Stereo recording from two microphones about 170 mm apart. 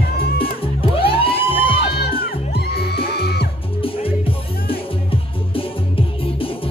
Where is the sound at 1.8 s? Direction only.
70° left (ahead or behind).